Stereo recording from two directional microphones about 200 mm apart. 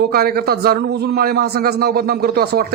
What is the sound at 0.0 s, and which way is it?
A man's voice, 50° right (ahead or behind).